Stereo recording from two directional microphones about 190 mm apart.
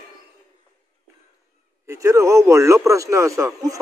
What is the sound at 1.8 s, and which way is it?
A man's voice, 15° right (ahead or behind).